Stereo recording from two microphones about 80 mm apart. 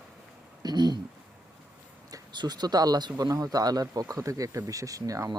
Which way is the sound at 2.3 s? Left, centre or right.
Right.